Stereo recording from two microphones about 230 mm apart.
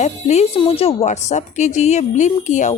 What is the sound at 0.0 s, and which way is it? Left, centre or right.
Speech, left.